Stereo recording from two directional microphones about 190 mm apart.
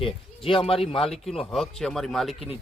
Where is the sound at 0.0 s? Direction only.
30° left (ahead or behind).